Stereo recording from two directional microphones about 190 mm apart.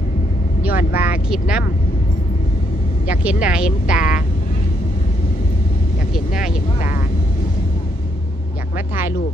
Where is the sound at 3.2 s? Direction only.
5° right (ahead or behind).